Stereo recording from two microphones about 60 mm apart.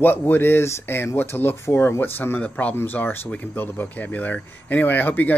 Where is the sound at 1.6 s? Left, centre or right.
Left.